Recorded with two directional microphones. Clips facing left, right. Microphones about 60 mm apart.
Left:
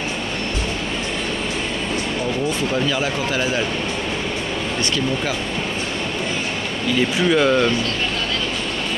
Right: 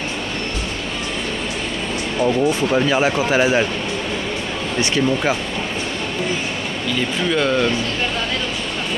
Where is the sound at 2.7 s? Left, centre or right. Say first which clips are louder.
Right 4 dB; right.